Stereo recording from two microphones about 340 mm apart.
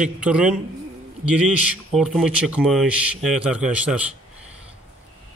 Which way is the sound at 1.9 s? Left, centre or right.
Centre.